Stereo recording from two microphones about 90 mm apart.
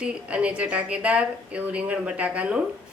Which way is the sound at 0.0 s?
15° right (ahead or behind).